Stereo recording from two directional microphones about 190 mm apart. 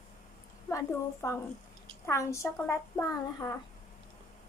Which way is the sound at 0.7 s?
15° left (ahead or behind).